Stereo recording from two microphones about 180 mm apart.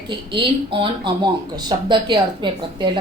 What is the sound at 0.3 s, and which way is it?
Speech, 25° right (ahead or behind).